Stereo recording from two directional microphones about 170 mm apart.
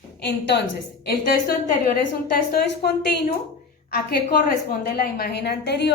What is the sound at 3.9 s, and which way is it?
A woman's voice, 60° left (ahead or behind).